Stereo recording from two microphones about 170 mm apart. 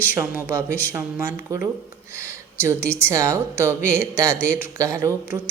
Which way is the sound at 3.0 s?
15° right (ahead or behind).